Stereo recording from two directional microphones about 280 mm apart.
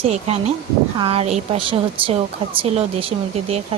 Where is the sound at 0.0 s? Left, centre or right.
Right.